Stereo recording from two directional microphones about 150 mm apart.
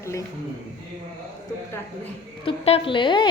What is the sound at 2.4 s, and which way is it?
Speech, 35° left (ahead or behind).